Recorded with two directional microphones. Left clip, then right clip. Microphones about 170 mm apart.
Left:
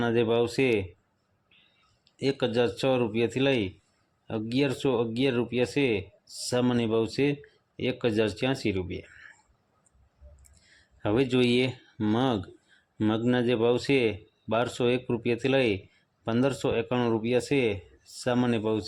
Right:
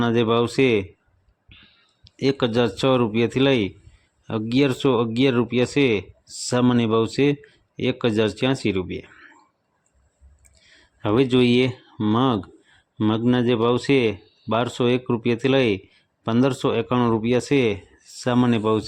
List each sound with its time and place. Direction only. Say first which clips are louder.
0.0 s speech: right 5 dB; 20° right (ahead or behind)
2.0 s speech: right 6 dB; 20° right (ahead or behind)
10.5 s speech: right 6 dB; 20° right (ahead or behind)